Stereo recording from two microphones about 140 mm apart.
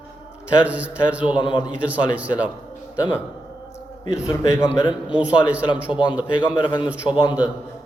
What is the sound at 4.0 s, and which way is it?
A man's voice, 30° left (ahead or behind).